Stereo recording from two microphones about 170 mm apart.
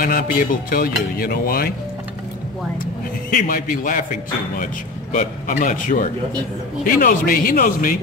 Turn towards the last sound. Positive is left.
turn(degrees=55)  # may be behind; listen again after turning